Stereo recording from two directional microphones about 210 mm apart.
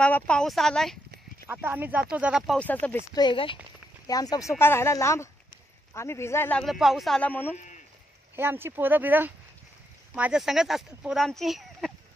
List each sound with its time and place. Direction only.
0.0 s speech: 5° left (ahead or behind)
1.5 s speech: 10° right (ahead or behind); by 3.0 s 5° left (ahead or behind)
3.2 s speech: 25° left (ahead or behind)
7.5 s speech: 35° left (ahead or behind)
8.4 s speech: 10° right (ahead or behind)